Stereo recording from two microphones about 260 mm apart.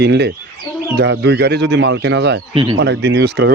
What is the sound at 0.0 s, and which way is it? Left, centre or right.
Speech, right.